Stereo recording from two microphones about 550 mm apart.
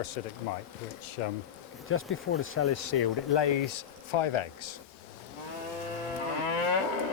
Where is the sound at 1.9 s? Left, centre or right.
Left.